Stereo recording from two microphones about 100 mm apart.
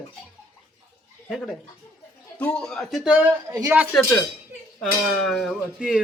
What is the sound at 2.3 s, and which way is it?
Speech, 10° left (ahead or behind).